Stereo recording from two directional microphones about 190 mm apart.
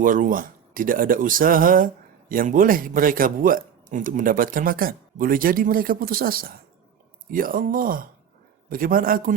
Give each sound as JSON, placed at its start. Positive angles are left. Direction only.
{"t": 0.0, "sound": "a man's voice", "side_deg": -45}